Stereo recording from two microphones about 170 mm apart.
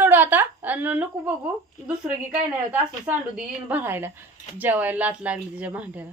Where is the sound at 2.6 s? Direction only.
10° right (ahead or behind).